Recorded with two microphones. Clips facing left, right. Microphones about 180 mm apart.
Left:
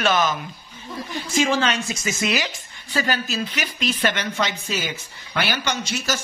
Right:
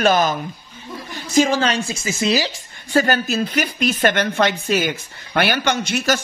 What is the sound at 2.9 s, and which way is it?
A woman's voice, 50° right (ahead or behind).